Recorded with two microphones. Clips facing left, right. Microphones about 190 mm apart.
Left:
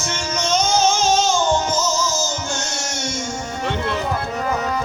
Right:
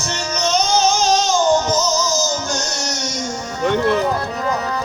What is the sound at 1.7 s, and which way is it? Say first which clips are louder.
Music: right 3 dB; 40° right (ahead or behind).